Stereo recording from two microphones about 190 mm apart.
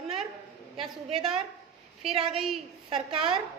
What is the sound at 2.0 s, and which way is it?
Speech, centre (ahead or behind).